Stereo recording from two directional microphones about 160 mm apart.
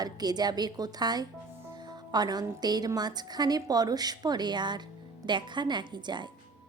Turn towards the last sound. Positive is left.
turn(degrees=-30)  # may be behind; listen again after turning